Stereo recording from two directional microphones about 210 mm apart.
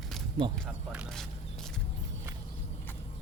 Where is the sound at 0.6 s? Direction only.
Centre (ahead or behind).